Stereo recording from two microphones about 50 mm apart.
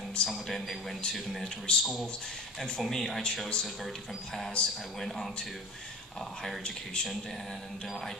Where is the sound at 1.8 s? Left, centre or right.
Centre.